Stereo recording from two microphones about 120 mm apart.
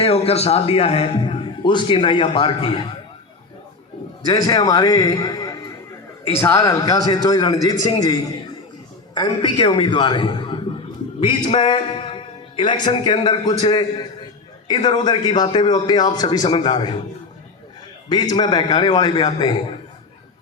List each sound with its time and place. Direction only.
0.0 s a man's voice: 55° left (ahead or behind)
4.3 s a man's voice: 35° left (ahead or behind)
6.2 s a man's voice: 20° left (ahead or behind)
9.4 s a man's voice: 45° left (ahead or behind)
18.1 s a man's voice: 35° left (ahead or behind)